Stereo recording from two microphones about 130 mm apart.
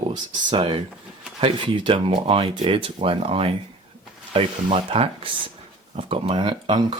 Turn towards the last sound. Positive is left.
turn(degrees=-35)  # may be behind; listen again after turning